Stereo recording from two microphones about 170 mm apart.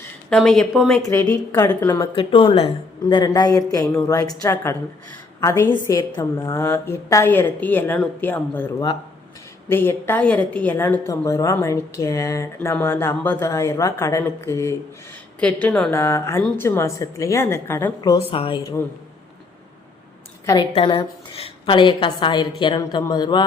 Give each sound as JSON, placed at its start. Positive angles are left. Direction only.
{"t": 0.3, "sound": "speech", "side_deg": 5}
{"t": 1.0, "sound": "a woman's voice", "side_deg": 20}
{"t": 2.1, "sound": "a woman's voice", "side_deg": 30}
{"t": 6.3, "sound": "speech", "side_deg": 15}
{"t": 18.2, "sound": "speech", "side_deg": 30}
{"t": 20.4, "sound": "a woman's voice", "side_deg": 20}
{"t": 20.7, "sound": "a woman's voice", "side_deg": 35}